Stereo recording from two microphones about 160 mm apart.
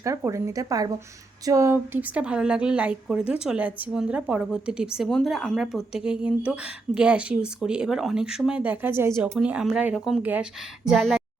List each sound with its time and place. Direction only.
0.0 s a woman's voice: 20° right (ahead or behind); by 11.2 s centre (ahead or behind)